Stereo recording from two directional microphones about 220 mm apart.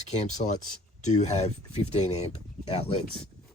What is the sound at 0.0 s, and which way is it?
Speech, 30° left (ahead or behind).